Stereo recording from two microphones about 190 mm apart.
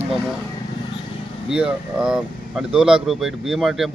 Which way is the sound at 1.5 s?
5° right (ahead or behind).